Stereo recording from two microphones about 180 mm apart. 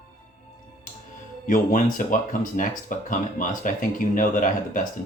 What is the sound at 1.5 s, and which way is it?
Speech, 50° left (ahead or behind).